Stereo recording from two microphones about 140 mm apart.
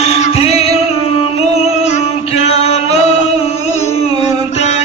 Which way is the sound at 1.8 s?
50° left (ahead or behind).